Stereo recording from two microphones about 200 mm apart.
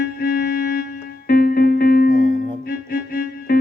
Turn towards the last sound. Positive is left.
turn(degrees=50)  # may be behind; listen again after turning